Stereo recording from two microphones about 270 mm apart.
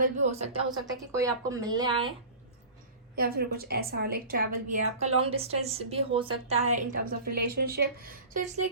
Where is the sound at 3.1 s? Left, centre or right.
Right.